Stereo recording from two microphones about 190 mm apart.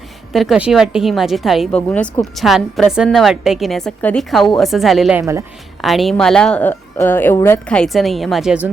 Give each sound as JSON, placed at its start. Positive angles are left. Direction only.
{"t": 0.3, "sound": "a woman's voice", "side_deg": -5}
{"t": 5.2, "sound": "speech", "side_deg": -15}
{"t": 5.8, "sound": "a woman's voice", "side_deg": 0}